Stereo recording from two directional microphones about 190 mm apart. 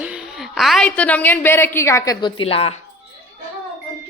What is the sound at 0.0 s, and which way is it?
A woman's voice, 5° right (ahead or behind).